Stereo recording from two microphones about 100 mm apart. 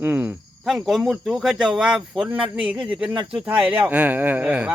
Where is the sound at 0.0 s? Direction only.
15° right (ahead or behind).